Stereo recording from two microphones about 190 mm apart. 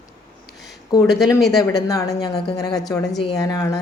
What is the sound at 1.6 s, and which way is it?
Speech, 20° left (ahead or behind).